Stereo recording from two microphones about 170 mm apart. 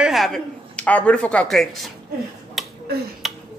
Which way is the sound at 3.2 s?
Centre (ahead or behind).